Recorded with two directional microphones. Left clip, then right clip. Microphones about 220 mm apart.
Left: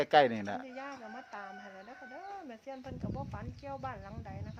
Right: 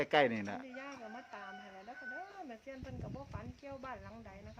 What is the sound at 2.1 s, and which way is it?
Chicken, 50° left (ahead or behind).